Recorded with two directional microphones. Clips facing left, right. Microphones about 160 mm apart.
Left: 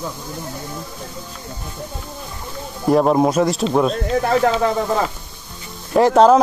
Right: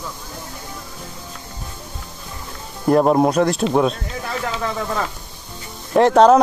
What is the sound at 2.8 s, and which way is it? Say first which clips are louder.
Speech: even; centre (ahead or behind).